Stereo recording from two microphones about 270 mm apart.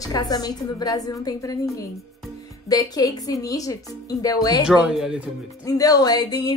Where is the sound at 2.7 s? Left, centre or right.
Centre.